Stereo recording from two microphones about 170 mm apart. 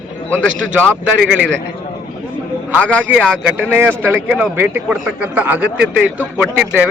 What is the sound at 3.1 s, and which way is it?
A man's voice, 5° right (ahead or behind).